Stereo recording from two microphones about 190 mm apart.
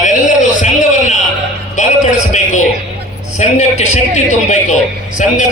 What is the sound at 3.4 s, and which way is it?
A man's voice, 35° left (ahead or behind).